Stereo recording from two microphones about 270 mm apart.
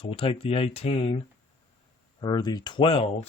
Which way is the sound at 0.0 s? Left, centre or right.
Centre.